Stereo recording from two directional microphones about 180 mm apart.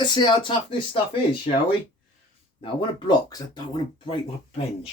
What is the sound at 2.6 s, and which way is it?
Speech, 25° left (ahead or behind).